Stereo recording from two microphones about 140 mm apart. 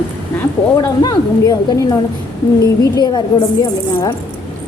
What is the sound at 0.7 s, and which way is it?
A woman's voice, 25° left (ahead or behind).